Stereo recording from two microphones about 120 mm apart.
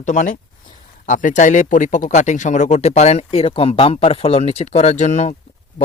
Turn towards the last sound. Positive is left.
turn(degrees=70)  # may be behind; listen again after turning